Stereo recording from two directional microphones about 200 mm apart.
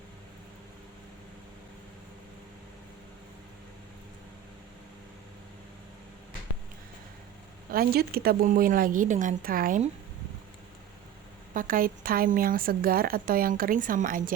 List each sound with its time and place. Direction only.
7.7 s a woman's voice: 50° right (ahead or behind)
11.5 s a woman's voice: 45° right (ahead or behind)